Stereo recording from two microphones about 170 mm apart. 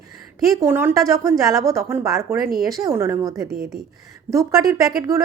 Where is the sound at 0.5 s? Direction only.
15° right (ahead or behind).